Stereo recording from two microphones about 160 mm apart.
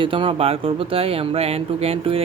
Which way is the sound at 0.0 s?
35° right (ahead or behind).